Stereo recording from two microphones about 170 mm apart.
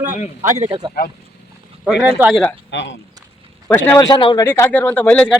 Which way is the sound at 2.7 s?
90° left.